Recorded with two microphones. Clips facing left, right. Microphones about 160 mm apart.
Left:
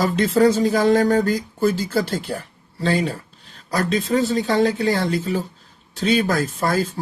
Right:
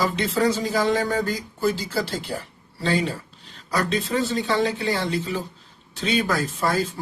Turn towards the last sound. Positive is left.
turn(degrees=40)  # may be behind; listen again after turning